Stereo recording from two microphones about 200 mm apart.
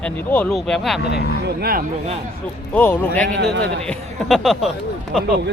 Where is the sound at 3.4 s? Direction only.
55° right (ahead or behind).